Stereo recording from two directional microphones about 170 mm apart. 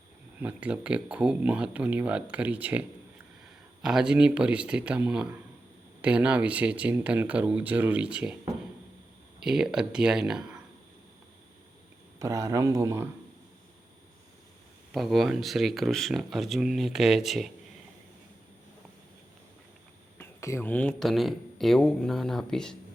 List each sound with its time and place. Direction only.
0.3 s speech: 10° right (ahead or behind)
3.8 s speech: 5° right (ahead or behind)
9.4 s speech: 5° right (ahead or behind)
12.2 s speech: 20° right (ahead or behind)
14.9 s speech: centre (ahead or behind)
20.1 s speech: 15° left (ahead or behind)